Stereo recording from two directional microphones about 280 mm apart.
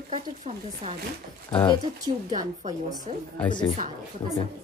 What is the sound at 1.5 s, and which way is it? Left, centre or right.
Speech, centre.